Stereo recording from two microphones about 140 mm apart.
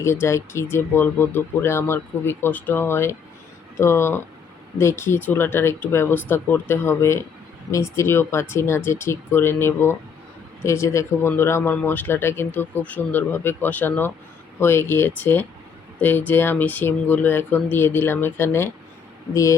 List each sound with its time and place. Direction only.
0.0 s speech: 20° left (ahead or behind)